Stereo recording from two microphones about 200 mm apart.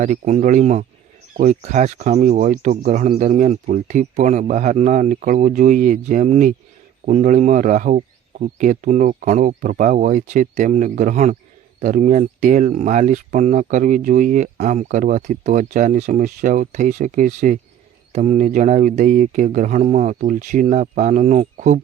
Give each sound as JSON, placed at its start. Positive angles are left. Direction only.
{"t": 0.0, "sound": "speech", "side_deg": -35}